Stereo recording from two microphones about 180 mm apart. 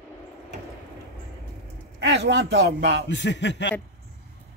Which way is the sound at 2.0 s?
70° right (ahead or behind).